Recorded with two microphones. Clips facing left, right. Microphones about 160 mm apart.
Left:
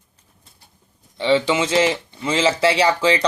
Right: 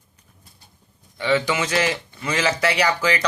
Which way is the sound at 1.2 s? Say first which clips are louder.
Left 3 dB; 25° left (ahead or behind).